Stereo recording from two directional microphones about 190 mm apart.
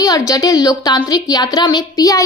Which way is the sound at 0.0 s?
20° left (ahead or behind).